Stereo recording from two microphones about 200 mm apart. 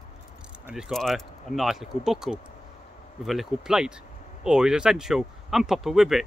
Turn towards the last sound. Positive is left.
turn(degrees=0)  # may be behind; listen again after turning